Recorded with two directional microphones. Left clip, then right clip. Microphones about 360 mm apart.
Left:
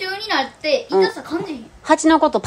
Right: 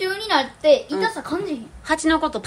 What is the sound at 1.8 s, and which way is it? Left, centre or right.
Speech, centre.